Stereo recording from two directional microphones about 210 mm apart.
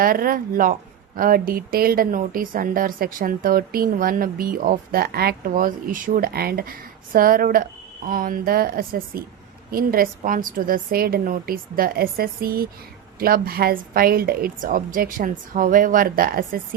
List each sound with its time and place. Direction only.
0.0 s a woman's voice: 45° right (ahead or behind)